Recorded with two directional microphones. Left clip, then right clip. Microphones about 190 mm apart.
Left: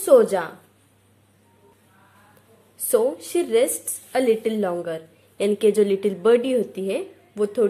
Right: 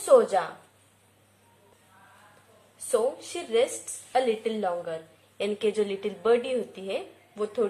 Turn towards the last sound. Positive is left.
turn(degrees=40)  # may be behind; listen again after turning